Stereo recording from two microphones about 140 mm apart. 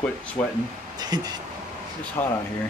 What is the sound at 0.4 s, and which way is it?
Speech, 15° left (ahead or behind).